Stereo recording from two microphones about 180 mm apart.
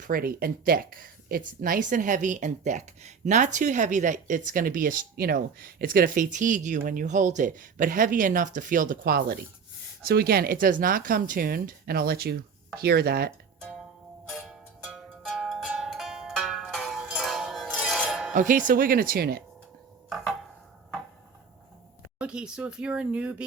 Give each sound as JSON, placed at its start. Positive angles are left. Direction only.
{"t": 0.0, "sound": "speech", "side_deg": -55}
{"t": 14.3, "sound": "music", "side_deg": -5}
{"t": 18.3, "sound": "speech", "side_deg": -50}
{"t": 20.1, "sound": "a sound", "side_deg": 0}
{"t": 22.2, "sound": "speech", "side_deg": -5}